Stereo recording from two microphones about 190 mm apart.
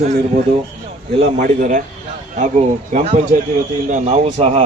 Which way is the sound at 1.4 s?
40° right (ahead or behind).